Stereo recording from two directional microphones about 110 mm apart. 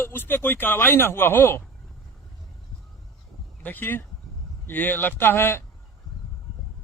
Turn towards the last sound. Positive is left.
turn(degrees=20)  # may be behind; listen again after turning